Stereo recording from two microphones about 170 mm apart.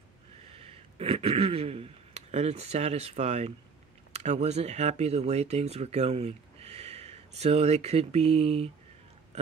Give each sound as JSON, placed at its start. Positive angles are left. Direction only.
{"t": 0.5, "sound": "speech", "side_deg": -35}